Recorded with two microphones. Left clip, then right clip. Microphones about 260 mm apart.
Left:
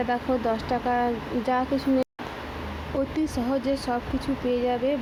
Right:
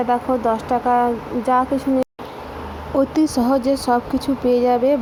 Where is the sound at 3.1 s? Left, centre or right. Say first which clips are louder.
Right 9 dB; centre.